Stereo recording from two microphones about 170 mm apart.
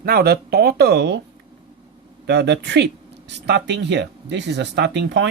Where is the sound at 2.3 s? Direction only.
90° right.